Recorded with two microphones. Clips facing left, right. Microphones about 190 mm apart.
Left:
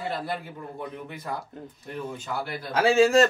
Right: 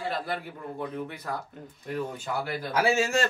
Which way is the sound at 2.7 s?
30° left (ahead or behind).